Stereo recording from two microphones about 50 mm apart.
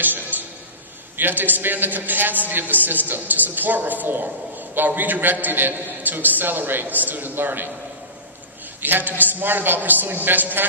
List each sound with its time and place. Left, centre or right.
0.0 s a sound: right
1.1 s a man's voice: right
8.8 s a man's voice: right